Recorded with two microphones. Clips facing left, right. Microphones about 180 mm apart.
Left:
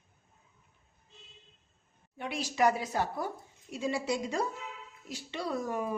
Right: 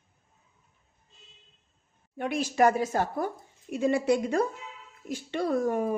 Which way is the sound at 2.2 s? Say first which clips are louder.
Right 5 dB; 50° right (ahead or behind).